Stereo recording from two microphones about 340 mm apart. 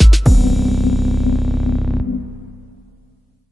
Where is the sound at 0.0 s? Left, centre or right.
Centre.